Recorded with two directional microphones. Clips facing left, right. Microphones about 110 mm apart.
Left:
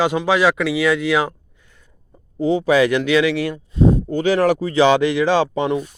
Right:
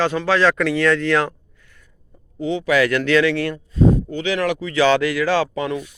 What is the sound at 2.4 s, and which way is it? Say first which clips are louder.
Speech: left 5 dB; 35° left (ahead or behind).